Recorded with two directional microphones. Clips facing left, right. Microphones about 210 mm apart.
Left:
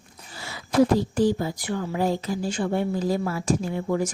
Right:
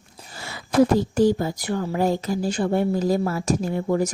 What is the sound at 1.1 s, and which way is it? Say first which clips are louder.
Speech: right 3 dB; 45° right (ahead or behind).